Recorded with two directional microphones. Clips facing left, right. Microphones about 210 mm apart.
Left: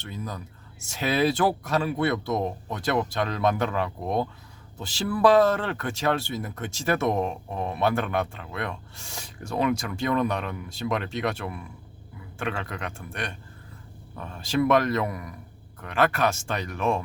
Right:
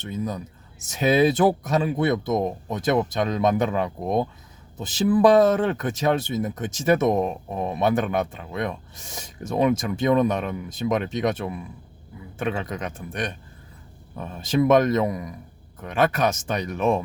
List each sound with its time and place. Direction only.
0.0 s speech: 20° right (ahead or behind)